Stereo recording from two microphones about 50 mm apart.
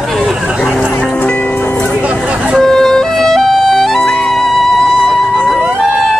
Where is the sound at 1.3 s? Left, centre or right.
Left.